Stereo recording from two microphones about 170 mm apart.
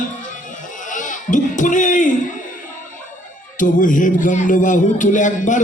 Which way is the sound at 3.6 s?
50° left (ahead or behind).